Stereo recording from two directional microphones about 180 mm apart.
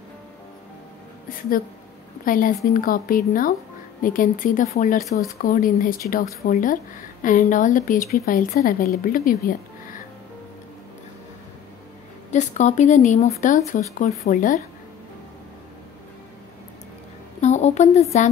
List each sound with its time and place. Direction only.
2.2 s a woman's voice: 50° left (ahead or behind)
12.3 s speech: 40° left (ahead or behind)
17.4 s a sound: 40° left (ahead or behind)